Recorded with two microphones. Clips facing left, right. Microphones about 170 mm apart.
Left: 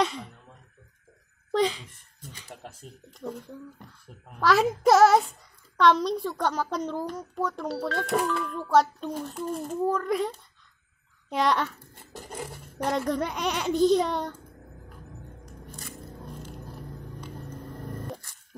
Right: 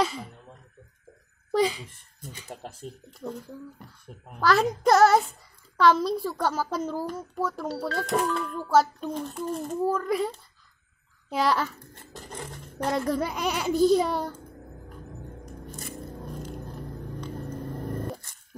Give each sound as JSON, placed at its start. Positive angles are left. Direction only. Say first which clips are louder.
{"t": 0.0, "sound": "a child's voice", "louder": "even", "side_deg": 0}
{"t": 1.5, "sound": "a child's voice", "louder": "right 1 dB", "side_deg": -5}
{"t": 2.3, "sound": "speech", "louder": "right 4 dB", "side_deg": -25}
{"t": 3.1, "sound": "a child's voice", "louder": "left 1 dB", "side_deg": -5}
{"t": 11.9, "sound": "a sound", "louder": "left 1 dB", "side_deg": 10}
{"t": 12.7, "sound": "a child's voice", "louder": "right 1 dB", "side_deg": -5}